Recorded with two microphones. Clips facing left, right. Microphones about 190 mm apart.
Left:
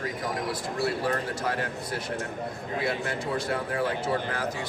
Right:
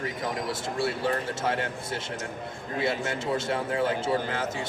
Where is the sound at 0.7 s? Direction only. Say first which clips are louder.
Even; 25° right (ahead or behind).